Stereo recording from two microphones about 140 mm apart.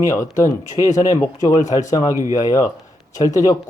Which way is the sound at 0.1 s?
25° left (ahead or behind).